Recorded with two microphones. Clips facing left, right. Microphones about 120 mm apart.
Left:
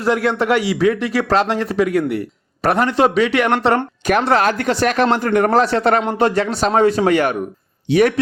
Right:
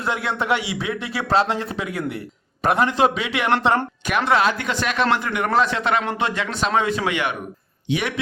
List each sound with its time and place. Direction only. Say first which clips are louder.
0.0 s speech: left 7 dB; 40° left (ahead or behind)